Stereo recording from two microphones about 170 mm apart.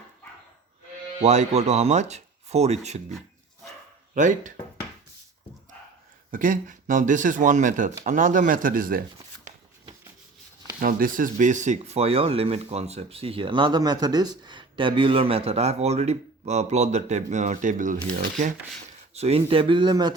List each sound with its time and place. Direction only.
1.2 s speech: 40° right (ahead or behind)
4.1 s speech: 50° right (ahead or behind)
6.3 s speech: 50° right (ahead or behind)
10.8 s speech: 55° right (ahead or behind); by 20.1 s 25° right (ahead or behind)